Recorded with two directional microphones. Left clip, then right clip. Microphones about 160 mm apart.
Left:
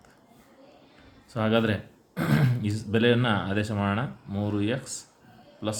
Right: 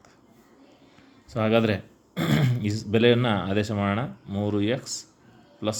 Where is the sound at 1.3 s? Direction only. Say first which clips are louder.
Right 3 dB; 25° right (ahead or behind).